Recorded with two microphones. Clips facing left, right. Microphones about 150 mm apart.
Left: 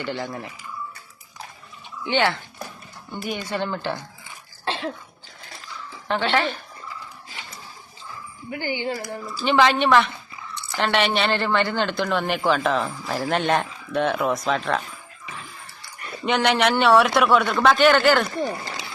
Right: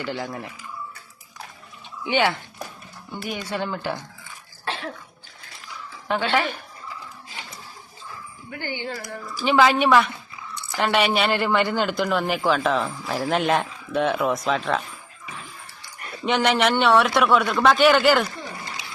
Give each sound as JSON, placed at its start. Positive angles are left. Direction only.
{"t": 0.0, "sound": "speech", "side_deg": 0}
{"t": 2.0, "sound": "speech", "side_deg": -10}
{"t": 3.1, "sound": "speech", "side_deg": 0}
{"t": 4.6, "sound": "cough", "side_deg": 25}
{"t": 6.3, "sound": "speech", "side_deg": -10}
{"t": 8.4, "sound": "speech", "side_deg": 15}
{"t": 8.9, "sound": "a woman's voice", "side_deg": 25}
{"t": 9.4, "sound": "speech", "side_deg": -5}
{"t": 16.2, "sound": "speech", "side_deg": 0}